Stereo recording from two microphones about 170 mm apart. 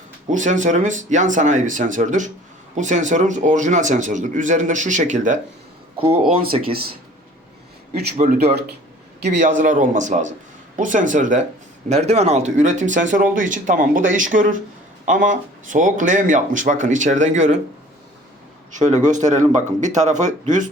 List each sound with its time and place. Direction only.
0.3 s speech: 45° right (ahead or behind)
6.0 s speech: 35° right (ahead or behind)
9.4 s speech: 50° right (ahead or behind)
18.7 s speech: 45° right (ahead or behind)